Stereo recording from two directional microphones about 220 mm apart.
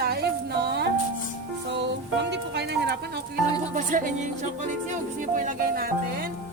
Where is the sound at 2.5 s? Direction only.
50° right (ahead or behind).